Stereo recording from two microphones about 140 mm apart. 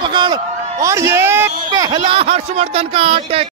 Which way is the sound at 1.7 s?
30° right (ahead or behind).